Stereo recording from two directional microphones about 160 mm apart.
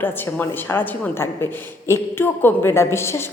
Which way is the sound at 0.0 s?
10° left (ahead or behind).